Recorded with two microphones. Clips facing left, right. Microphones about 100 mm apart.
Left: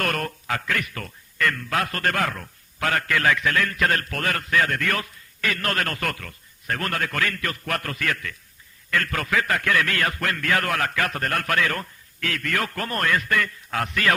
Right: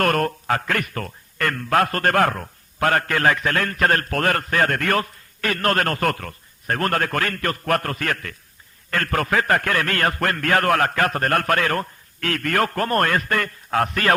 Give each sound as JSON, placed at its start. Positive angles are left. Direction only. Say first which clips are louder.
{"t": 0.0, "sound": "speech", "louder": "right 7 dB", "side_deg": -45}